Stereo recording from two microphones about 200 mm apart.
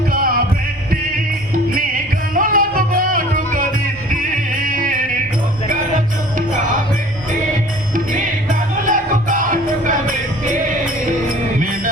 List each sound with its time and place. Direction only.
0.1 s music: 45° right (ahead or behind)
1.5 s music: 45° right (ahead or behind)
6.3 s music: 40° right (ahead or behind)
7.9 s music: 40° right (ahead or behind)